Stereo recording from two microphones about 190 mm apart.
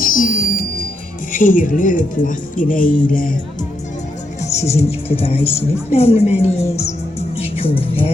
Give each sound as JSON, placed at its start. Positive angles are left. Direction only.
{"t": 0.0, "sound": "music", "side_deg": 45}
{"t": 1.3, "sound": "speech", "side_deg": 45}
{"t": 4.4, "sound": "a woman's voice", "side_deg": 35}
{"t": 6.7, "sound": "music", "side_deg": 35}